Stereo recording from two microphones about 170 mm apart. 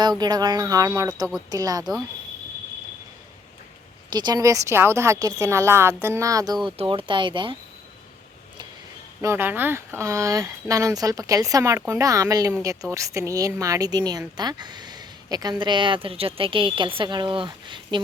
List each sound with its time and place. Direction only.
0.0 s speech: 25° right (ahead or behind)
4.1 s a woman's voice: 25° right (ahead or behind)
6.7 s speech: 30° right (ahead or behind)
9.2 s speech: 15° right (ahead or behind); by 18.0 s 30° right (ahead or behind)